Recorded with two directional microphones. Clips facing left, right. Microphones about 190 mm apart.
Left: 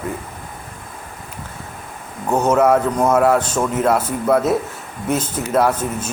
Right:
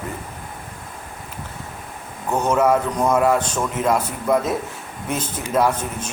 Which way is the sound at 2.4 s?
10° left (ahead or behind).